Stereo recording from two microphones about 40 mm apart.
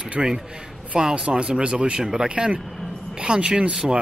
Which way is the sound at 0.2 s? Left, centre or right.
Right.